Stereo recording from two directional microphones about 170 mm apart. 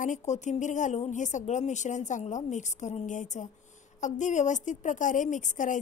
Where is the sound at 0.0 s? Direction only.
45° left (ahead or behind).